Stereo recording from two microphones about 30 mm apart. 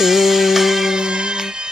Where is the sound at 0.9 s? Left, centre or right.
Right.